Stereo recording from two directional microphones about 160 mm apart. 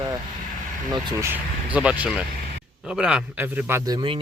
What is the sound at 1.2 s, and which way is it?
Speech, 10° right (ahead or behind).